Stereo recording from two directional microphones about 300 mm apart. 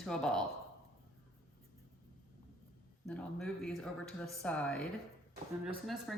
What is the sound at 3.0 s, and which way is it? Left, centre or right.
Speech, centre.